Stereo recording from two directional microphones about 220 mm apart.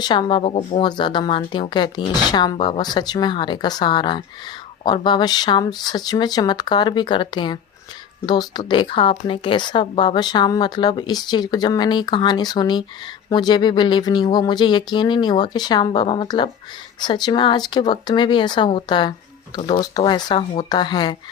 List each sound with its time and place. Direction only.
0.0 s a woman's voice: 20° left (ahead or behind)